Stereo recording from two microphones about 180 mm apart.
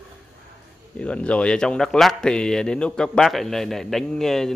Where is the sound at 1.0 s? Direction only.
5° left (ahead or behind).